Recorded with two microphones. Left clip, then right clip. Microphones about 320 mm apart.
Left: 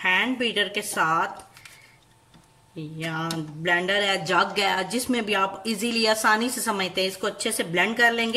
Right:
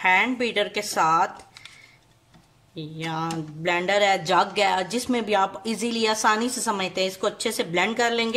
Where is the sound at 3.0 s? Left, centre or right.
Centre.